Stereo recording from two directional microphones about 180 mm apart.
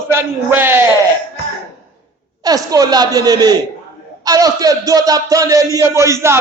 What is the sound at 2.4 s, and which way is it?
A woman's voice, 20° right (ahead or behind).